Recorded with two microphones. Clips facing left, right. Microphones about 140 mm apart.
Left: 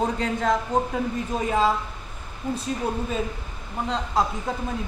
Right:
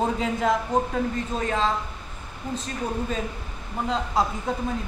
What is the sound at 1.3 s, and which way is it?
Speech, 10° left (ahead or behind).